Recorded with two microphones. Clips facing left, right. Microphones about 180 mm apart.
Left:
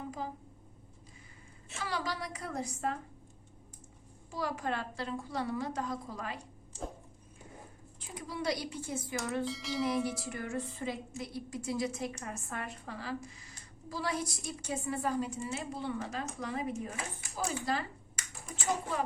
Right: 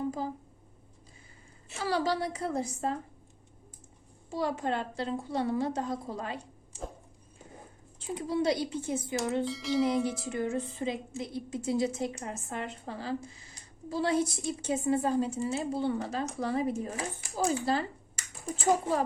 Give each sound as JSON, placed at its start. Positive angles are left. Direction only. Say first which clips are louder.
{"t": 1.7, "sound": "a woman's voice", "louder": "right 8 dB", "side_deg": -35}
{"t": 4.3, "sound": "a woman's voice", "louder": "right 5 dB", "side_deg": -25}
{"t": 7.9, "sound": "a woman's voice", "louder": "right 10 dB", "side_deg": -25}
{"t": 9.4, "sound": "bell", "louder": "right 6 dB", "side_deg": 0}
{"t": 10.2, "sound": "a woman's voice", "louder": "right 6 dB", "side_deg": -20}